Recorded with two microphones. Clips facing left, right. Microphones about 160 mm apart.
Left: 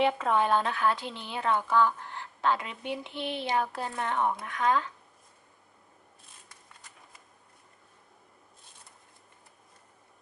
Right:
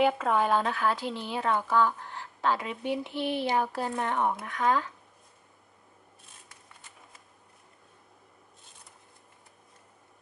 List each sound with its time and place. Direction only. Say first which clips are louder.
0.0 s a woman's voice: right 1 dB; centre (ahead or behind)
3.1 s speech: right 4 dB; 20° left (ahead or behind)
3.5 s a woman's voice: right 2 dB; 15° right (ahead or behind)